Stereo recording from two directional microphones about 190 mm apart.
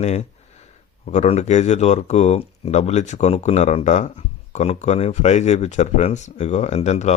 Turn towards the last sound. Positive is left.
turn(degrees=35)  # may be behind; listen again after turning